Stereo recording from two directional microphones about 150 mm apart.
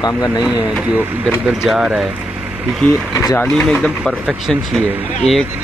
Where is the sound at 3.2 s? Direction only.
20° left (ahead or behind).